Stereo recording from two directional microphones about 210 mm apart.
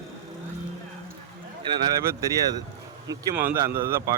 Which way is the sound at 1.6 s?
15° right (ahead or behind).